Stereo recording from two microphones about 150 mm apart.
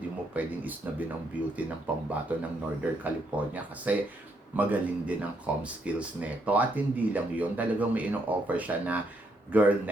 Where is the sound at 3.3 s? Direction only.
10° right (ahead or behind).